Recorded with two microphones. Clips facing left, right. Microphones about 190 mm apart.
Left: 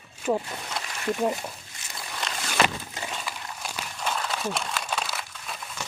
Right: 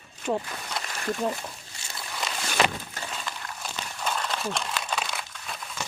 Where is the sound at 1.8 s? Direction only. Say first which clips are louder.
Right 3 dB; 30° right (ahead or behind).